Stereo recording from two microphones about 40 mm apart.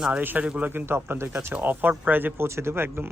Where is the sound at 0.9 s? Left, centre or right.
Right.